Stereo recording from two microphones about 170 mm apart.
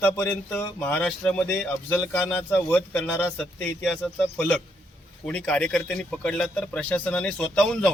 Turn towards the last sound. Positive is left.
turn(degrees=5)  # may be behind; listen again after turning